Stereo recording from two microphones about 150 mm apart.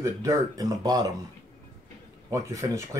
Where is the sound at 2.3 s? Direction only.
20° right (ahead or behind).